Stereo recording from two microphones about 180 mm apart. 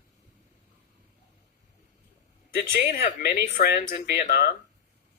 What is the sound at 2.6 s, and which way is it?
Speech, 60° left (ahead or behind).